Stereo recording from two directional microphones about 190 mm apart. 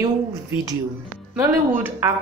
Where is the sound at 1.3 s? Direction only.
10° right (ahead or behind).